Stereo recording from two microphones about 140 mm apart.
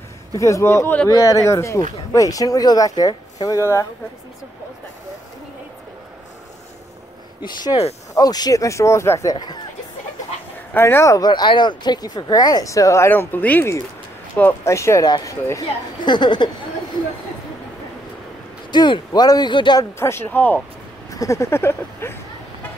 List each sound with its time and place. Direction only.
0.4 s speech: 20° left (ahead or behind)
8.1 s speech: 30° left (ahead or behind)
9.3 s speech: 30° left (ahead or behind)
10.7 s speech: 15° left (ahead or behind); by 16.4 s 35° left (ahead or behind)
18.7 s speech: 30° left (ahead or behind)
20.0 s speech: 15° left (ahead or behind)
21.1 s speech: 25° left (ahead or behind)